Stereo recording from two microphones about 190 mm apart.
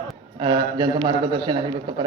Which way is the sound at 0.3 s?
25° right (ahead or behind).